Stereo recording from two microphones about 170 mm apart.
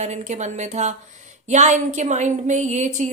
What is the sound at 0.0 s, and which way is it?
A woman's voice, 45° right (ahead or behind).